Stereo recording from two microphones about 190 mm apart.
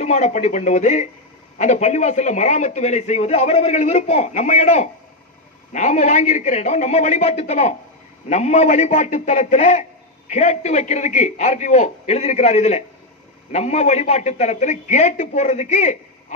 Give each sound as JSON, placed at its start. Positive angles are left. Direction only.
{"t": 0.0, "sound": "a man's voice", "side_deg": 35}